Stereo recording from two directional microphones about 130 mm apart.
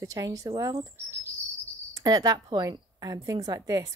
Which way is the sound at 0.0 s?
25° right (ahead or behind).